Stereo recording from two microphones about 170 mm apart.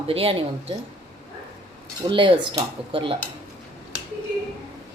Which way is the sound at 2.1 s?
30° right (ahead or behind).